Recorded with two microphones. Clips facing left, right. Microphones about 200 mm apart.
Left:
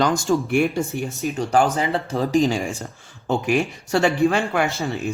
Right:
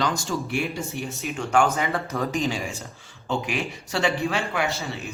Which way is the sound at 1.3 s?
35° left (ahead or behind).